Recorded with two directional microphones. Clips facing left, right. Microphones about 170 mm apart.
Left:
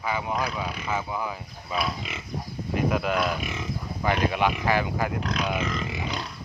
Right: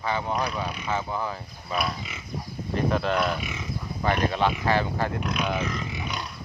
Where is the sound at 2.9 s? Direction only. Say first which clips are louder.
Right 2 dB; 5° left (ahead or behind).